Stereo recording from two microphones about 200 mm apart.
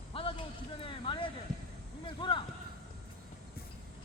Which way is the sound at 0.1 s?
25° left (ahead or behind).